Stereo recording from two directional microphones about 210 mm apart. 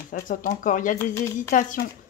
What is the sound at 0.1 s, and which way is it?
Speech, 40° left (ahead or behind).